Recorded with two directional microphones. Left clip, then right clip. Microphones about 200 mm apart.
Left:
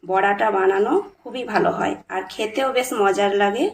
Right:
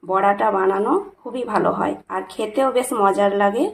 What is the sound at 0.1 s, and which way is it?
A woman's voice, 40° right (ahead or behind).